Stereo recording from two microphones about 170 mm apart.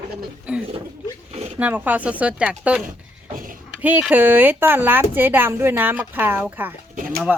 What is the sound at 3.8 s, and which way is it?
Speech, 10° right (ahead or behind).